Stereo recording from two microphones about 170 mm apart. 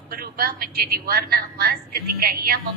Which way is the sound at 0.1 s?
60° right (ahead or behind).